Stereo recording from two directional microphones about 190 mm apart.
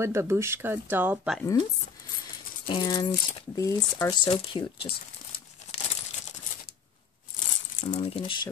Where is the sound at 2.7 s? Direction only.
20° left (ahead or behind).